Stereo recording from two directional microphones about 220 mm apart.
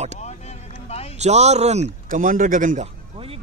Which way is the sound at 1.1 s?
30° right (ahead or behind).